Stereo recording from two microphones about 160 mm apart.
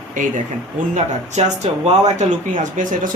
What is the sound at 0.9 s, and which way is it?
Speech, 45° right (ahead or behind).